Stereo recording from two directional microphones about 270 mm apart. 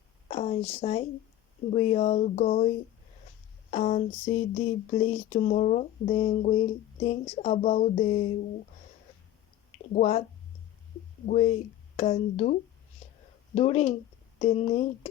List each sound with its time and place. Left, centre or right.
0.3 s a sound: left
0.8 s speech: left
9.9 s speech: left
11.3 s speech: left
13.6 s speech: left